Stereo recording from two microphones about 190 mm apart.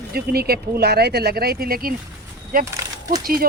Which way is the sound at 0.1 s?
55° right (ahead or behind).